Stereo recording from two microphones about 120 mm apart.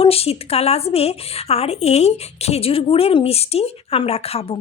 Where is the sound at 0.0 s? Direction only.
55° left (ahead or behind).